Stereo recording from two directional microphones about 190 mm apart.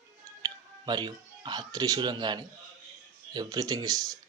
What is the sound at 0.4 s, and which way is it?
A man's voice, 20° right (ahead or behind).